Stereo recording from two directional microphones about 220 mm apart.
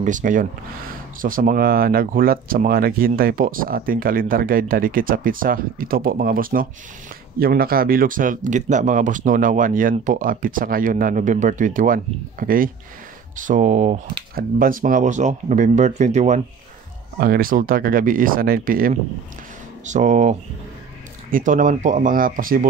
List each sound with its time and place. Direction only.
0.0 s speech: 35° right (ahead or behind)
17.2 s speech: 40° right (ahead or behind)